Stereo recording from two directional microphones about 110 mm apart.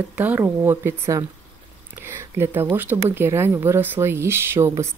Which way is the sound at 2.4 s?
20° right (ahead or behind).